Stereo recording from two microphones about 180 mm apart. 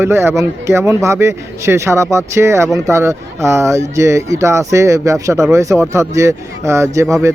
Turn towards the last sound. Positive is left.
turn(degrees=-15)  # may be behind; listen again after turning